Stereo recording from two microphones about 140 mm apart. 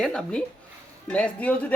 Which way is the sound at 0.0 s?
5° left (ahead or behind).